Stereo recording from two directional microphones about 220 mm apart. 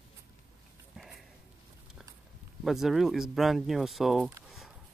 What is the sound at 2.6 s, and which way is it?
Speech, centre (ahead or behind).